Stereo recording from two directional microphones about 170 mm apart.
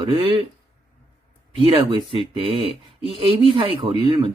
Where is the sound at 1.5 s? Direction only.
30° right (ahead or behind).